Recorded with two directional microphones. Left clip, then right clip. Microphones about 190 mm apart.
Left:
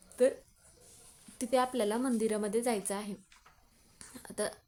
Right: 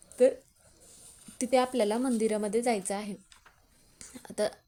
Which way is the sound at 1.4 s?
15° right (ahead or behind).